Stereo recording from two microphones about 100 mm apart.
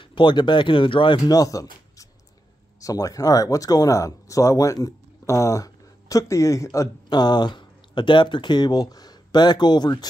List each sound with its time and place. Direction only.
0.0 s speech: 55° left (ahead or behind)
1.2 s speech: 35° left (ahead or behind)
7.1 s speech: 45° left (ahead or behind)